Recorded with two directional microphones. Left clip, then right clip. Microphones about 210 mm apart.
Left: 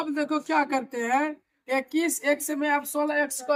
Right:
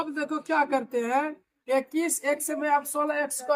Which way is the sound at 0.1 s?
25° left (ahead or behind).